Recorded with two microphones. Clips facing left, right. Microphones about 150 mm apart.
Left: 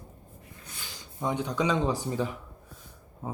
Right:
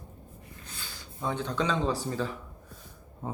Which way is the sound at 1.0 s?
15° left (ahead or behind).